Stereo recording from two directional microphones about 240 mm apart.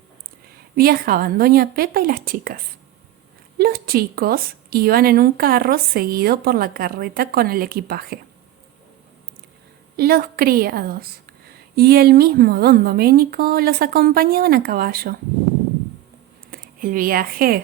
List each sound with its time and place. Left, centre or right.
0.8 s a woman's voice: right
3.6 s a woman's voice: right
10.0 s a woman's voice: right
16.5 s a woman's voice: right